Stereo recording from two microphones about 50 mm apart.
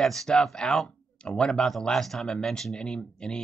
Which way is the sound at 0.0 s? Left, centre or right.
Centre.